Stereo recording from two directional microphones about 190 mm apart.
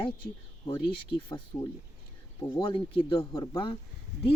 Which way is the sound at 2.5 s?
25° left (ahead or behind).